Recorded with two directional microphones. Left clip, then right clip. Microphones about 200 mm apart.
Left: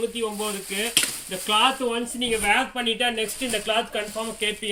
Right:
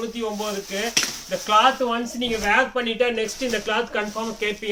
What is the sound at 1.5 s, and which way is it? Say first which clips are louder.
Speech: right 3 dB; 15° right (ahead or behind).